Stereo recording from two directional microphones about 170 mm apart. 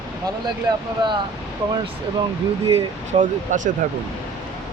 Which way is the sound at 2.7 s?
45° right (ahead or behind).